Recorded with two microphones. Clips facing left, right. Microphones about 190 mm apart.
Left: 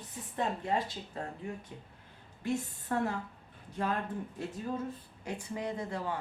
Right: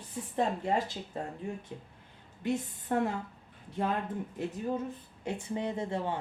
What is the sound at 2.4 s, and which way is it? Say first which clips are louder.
Speech: right 2 dB; 20° right (ahead or behind).